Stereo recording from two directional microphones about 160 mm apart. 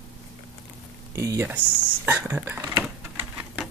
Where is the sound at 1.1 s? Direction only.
15° right (ahead or behind).